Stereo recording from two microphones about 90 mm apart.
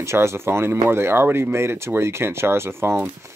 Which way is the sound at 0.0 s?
30° right (ahead or behind).